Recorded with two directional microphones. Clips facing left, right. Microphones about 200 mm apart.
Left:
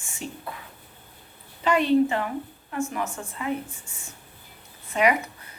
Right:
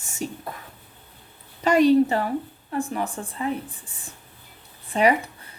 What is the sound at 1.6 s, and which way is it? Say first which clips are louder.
A woman's voice: right 4 dB; 40° right (ahead or behind).